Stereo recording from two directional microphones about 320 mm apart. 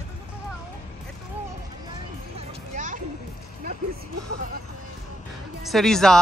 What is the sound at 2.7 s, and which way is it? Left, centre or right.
Music, right.